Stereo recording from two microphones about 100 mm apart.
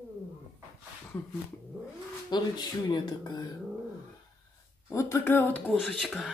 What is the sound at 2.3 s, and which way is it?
Speech, 45° left (ahead or behind).